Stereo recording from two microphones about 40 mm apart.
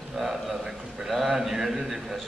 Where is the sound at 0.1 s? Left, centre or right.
Centre.